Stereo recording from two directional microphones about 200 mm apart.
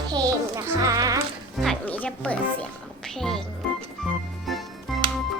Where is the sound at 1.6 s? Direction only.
5° left (ahead or behind).